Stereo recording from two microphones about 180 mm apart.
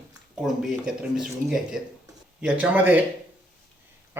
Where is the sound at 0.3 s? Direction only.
Centre (ahead or behind).